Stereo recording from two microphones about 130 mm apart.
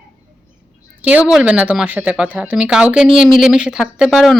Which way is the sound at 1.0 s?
10° right (ahead or behind).